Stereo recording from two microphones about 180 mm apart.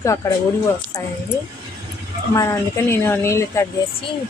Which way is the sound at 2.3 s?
15° left (ahead or behind).